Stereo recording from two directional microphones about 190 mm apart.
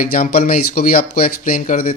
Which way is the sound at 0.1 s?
50° left (ahead or behind).